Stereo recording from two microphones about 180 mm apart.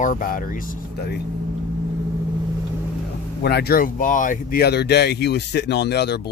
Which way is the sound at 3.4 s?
60° left (ahead or behind).